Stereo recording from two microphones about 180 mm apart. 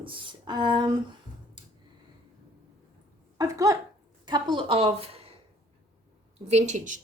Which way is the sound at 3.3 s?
20° right (ahead or behind).